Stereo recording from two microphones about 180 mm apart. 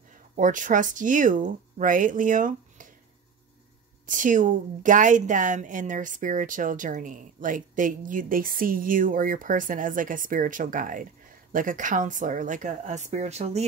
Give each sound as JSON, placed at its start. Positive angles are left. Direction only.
{"t": 0.4, "sound": "speech", "side_deg": -45}
{"t": 4.0, "sound": "speech", "side_deg": -45}